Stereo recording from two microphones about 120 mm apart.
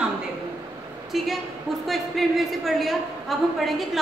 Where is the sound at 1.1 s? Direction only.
Centre (ahead or behind).